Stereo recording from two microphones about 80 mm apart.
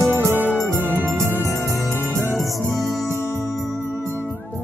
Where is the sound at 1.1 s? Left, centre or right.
Right.